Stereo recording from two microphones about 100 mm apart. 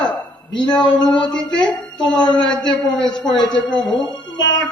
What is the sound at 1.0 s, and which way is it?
Music, 50° left (ahead or behind).